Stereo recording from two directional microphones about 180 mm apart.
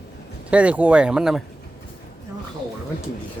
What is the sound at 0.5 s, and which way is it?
Speech, 5° right (ahead or behind).